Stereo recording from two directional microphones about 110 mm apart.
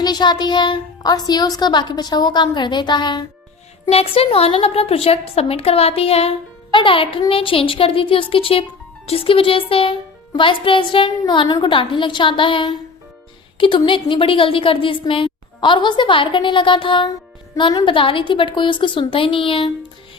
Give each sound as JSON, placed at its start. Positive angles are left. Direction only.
{"t": 0.0, "sound": "a woman's voice", "side_deg": 40}
{"t": 3.8, "sound": "a woman's voice", "side_deg": 65}
{"t": 6.7, "sound": "a woman's voice", "side_deg": 55}
{"t": 11.4, "sound": "a woman's voice", "side_deg": 35}
{"t": 11.7, "sound": "a woman's voice", "side_deg": 50}